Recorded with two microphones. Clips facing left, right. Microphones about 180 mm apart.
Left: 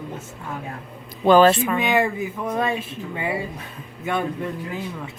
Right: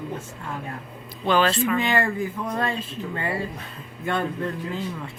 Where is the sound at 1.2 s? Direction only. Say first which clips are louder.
Left 7 dB; 45° left (ahead or behind).